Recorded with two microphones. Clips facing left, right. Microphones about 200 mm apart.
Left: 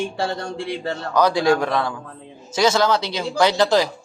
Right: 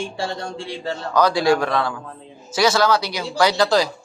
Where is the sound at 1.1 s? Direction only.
20° left (ahead or behind).